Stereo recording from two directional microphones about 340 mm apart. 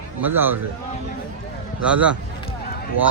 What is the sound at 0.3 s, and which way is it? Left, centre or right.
Speech, centre.